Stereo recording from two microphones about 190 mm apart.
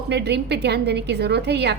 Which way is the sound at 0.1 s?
60° right (ahead or behind).